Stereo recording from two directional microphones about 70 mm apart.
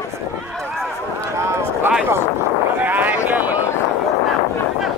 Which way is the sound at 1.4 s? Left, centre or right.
Right.